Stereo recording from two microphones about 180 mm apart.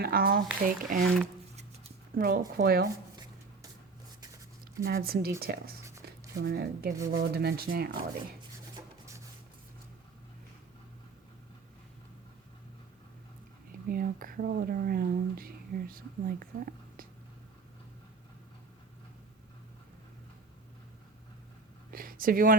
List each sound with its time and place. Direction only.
0.0 s speech: 55° right (ahead or behind)
2.1 s speech: 55° right (ahead or behind)
4.8 s speech: 55° right (ahead or behind)
8.7 s rub: 15° right (ahead or behind)
13.8 s speech: 55° right (ahead or behind)
21.9 s a sound: 50° right (ahead or behind)